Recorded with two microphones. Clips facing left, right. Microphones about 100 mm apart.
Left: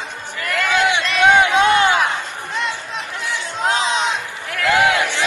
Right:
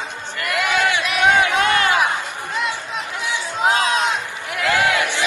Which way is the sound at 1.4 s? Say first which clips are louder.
Left 3 dB; 20° left (ahead or behind).